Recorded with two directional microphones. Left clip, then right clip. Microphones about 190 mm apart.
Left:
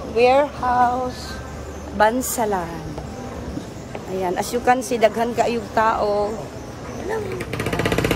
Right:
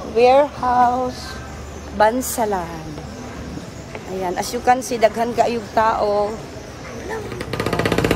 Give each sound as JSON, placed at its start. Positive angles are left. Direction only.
{"t": 0.1, "sound": "a woman's voice", "side_deg": 5}
{"t": 4.2, "sound": "a woman's voice", "side_deg": 15}
{"t": 7.7, "sound": "music", "side_deg": -40}